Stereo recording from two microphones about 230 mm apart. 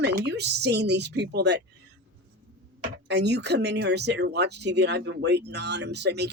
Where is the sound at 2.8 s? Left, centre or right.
Right.